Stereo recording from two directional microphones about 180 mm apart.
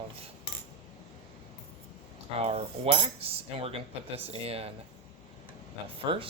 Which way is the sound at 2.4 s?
35° right (ahead or behind).